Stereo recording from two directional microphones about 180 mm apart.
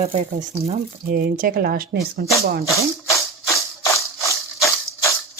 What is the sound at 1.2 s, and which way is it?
Speech, 50° right (ahead or behind).